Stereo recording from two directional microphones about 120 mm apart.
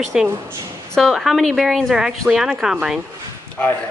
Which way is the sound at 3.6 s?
15° left (ahead or behind).